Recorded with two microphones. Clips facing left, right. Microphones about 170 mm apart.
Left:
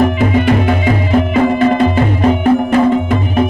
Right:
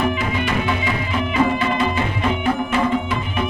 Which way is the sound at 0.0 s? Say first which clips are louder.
Left 9 dB; 45° left (ahead or behind).